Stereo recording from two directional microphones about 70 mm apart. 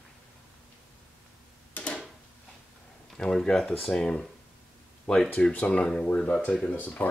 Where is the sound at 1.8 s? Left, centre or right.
Centre.